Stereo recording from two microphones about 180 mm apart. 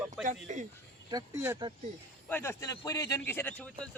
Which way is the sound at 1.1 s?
20° right (ahead or behind).